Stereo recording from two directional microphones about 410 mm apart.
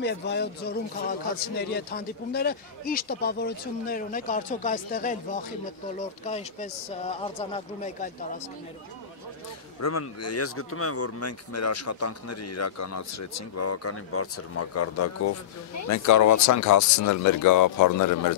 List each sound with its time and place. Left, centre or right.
0.0 s speech: left
9.8 s speech: left